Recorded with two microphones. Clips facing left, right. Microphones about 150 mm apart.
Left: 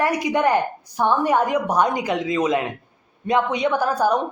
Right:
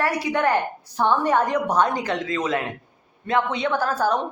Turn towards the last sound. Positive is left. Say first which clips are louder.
# left 2 dB
turn(degrees=15)  # may be behind; listen again after turning